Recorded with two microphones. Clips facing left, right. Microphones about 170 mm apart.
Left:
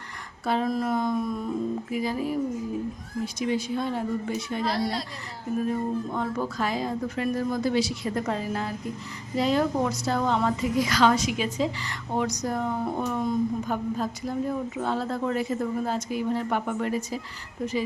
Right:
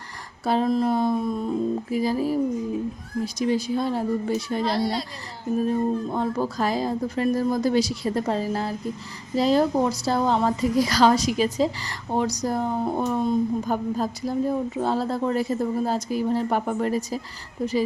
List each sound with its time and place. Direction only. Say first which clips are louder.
0.4 s a woman's voice: right 4 dB; 30° right (ahead or behind)
4.6 s a child's voice: right 1 dB; centre (ahead or behind)
5.5 s a woman's voice: right 4 dB; 30° right (ahead or behind)